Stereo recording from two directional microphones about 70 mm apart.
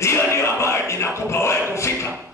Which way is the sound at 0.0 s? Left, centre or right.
Left.